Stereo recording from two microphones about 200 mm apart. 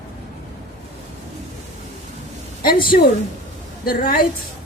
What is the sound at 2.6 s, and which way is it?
Speech, 45° left (ahead or behind).